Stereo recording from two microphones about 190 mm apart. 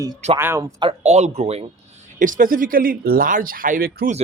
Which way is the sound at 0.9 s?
35° right (ahead or behind).